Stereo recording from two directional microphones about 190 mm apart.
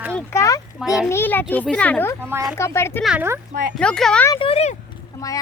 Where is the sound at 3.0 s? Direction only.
10° right (ahead or behind).